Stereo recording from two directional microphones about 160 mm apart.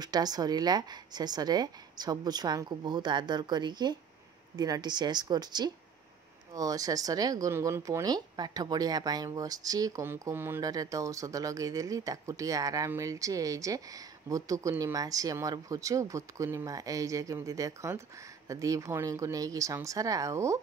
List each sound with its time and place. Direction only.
0.0 s speech: 25° right (ahead or behind)